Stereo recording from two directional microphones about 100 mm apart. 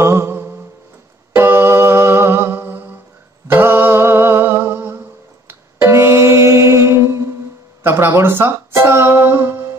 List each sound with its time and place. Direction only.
0.0 s mantra: 25° right (ahead or behind)
1.3 s humming: 20° right (ahead or behind)
5.5 s music: 25° right (ahead or behind)